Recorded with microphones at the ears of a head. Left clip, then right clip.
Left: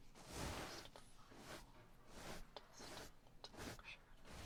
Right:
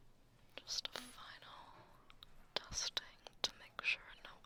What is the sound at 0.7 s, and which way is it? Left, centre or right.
Whispering, right.